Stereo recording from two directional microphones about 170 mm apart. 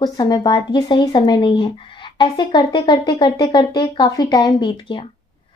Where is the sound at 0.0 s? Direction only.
25° left (ahead or behind).